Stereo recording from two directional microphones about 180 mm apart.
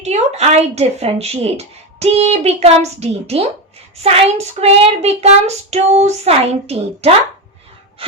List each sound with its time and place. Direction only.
0.0 s speech: 35° right (ahead or behind)